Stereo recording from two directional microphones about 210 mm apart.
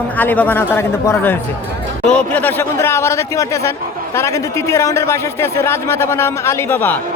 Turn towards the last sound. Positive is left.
turn(degrees=10)  # may be behind; listen again after turning